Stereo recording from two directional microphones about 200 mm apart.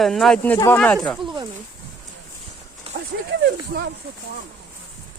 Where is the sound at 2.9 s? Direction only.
50° right (ahead or behind).